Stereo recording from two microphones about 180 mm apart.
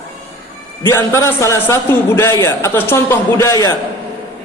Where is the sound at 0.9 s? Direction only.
15° left (ahead or behind).